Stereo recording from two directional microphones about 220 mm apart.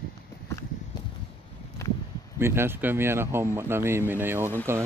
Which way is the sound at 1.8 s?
15° left (ahead or behind).